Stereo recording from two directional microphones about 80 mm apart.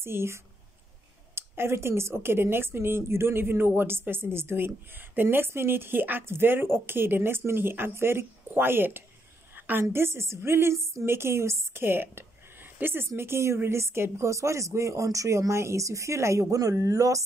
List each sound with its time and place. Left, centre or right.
0.0 s a woman's voice: right